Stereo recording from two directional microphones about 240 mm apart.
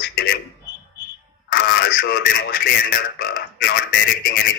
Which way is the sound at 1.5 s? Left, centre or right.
Left.